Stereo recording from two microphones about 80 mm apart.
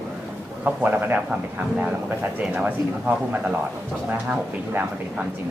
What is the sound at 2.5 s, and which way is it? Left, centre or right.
Speech, centre.